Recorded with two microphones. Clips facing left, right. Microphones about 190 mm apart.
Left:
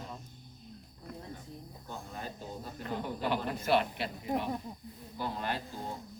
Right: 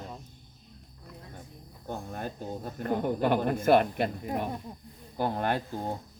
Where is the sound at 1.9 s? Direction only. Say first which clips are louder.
Right 7 dB; 50° right (ahead or behind).